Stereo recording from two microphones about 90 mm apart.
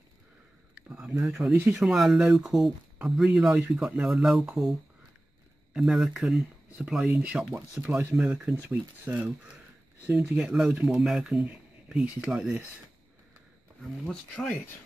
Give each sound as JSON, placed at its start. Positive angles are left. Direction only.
{"t": 0.7, "sound": "a sound", "side_deg": -5}
{"t": 1.2, "sound": "speech", "side_deg": -5}
{"t": 13.7, "sound": "speech", "side_deg": 5}